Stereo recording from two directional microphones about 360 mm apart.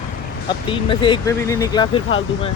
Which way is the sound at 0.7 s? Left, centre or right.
Centre.